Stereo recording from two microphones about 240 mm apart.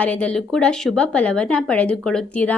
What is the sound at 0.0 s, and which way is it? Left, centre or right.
Speech, centre.